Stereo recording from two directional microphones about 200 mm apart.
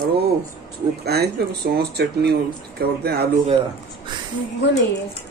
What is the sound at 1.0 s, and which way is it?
Speech, 50° right (ahead or behind).